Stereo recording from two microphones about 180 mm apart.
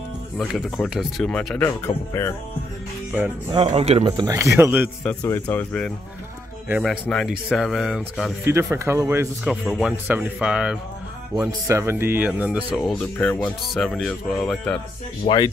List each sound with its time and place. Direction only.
0.4 s speech: centre (ahead or behind)
3.5 s speech: 35° right (ahead or behind)
4.0 s speech: 20° right (ahead or behind)
4.6 s speech: 10° right (ahead or behind)
5.0 s speech: 10° left (ahead or behind)
8.5 s speech: 15° right (ahead or behind)
9.7 s speech: 5° right (ahead or behind)
11.3 s speech: 15° right (ahead or behind)
12.9 s speech: 10° left (ahead or behind)
15.2 s speech: 20° left (ahead or behind)